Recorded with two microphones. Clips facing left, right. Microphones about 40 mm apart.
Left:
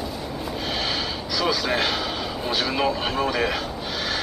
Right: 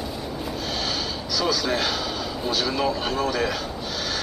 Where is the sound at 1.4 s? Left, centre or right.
Centre.